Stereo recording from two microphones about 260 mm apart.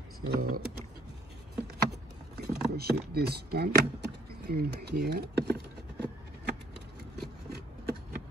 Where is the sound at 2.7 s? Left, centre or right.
Right.